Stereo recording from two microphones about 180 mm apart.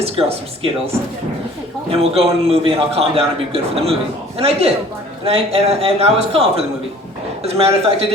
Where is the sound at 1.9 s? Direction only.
35° right (ahead or behind).